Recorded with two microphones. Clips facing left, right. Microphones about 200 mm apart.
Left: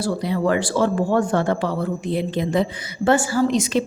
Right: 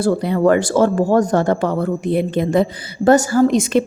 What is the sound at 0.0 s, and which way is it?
A woman's voice, 55° right (ahead or behind).